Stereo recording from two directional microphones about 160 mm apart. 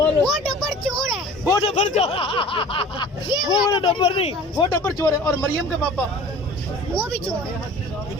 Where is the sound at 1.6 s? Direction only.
45° left (ahead or behind).